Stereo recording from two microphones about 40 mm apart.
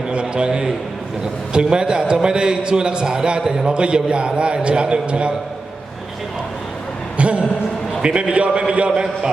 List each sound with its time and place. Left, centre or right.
0.1 s a man's voice: right
7.2 s a man's voice: right